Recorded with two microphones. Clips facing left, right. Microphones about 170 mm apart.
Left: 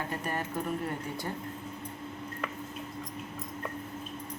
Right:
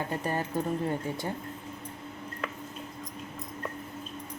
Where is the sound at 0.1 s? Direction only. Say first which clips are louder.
Right 3 dB; 30° right (ahead or behind).